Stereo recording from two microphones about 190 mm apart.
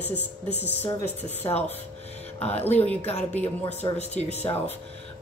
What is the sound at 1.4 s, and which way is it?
Speech, 25° left (ahead or behind).